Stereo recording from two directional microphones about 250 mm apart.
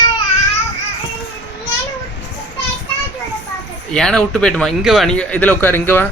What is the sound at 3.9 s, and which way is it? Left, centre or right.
Speech, centre.